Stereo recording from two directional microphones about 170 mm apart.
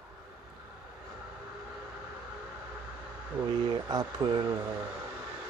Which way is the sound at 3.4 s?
25° right (ahead or behind).